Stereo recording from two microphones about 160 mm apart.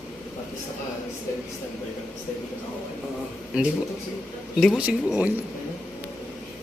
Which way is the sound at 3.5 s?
5° right (ahead or behind).